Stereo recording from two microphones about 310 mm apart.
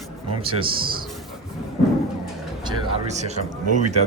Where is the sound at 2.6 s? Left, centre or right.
Right.